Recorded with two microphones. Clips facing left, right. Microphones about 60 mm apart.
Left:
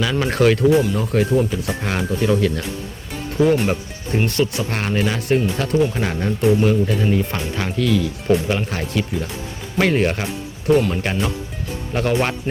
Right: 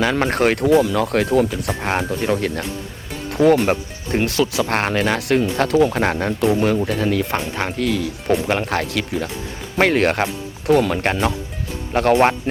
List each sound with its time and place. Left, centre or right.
0.0 s speech: right
0.7 s speech: right
1.8 s speech: right
2.0 s speech: right
5.8 s speech: right